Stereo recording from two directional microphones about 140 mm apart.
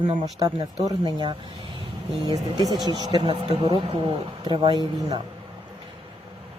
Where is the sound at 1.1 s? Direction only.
30° right (ahead or behind).